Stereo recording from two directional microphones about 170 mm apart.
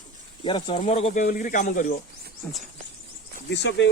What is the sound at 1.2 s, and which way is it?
Speech, 55° left (ahead or behind).